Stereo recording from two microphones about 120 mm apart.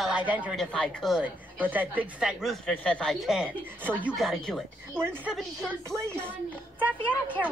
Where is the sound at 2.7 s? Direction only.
10° left (ahead or behind).